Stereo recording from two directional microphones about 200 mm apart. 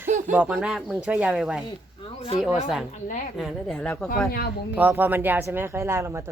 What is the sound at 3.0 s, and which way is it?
Speech, 40° left (ahead or behind).